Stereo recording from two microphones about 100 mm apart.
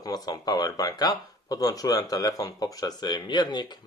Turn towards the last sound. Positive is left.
turn(degrees=45)  # may be behind; listen again after turning